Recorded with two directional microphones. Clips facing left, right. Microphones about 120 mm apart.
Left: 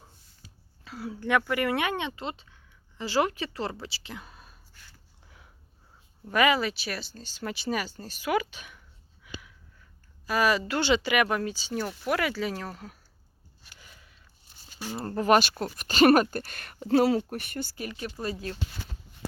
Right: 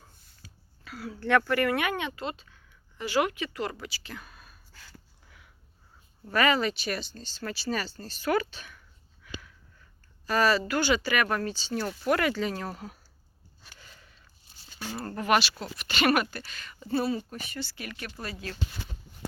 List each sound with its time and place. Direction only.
0.4 s a woman's voice: 25° left (ahead or behind)
6.3 s speech: 10° left (ahead or behind)
9.2 s a sound: 15° left (ahead or behind)
10.2 s speech: 10° left (ahead or behind)
10.7 s speech: 25° left (ahead or behind); by 13.0 s 5° right (ahead or behind)
13.7 s a sound: 10° left (ahead or behind)
14.9 s a woman's voice: 25° left (ahead or behind)
15.2 s speech: 45° left (ahead or behind)
17.8 s a woman's voice: 25° left (ahead or behind)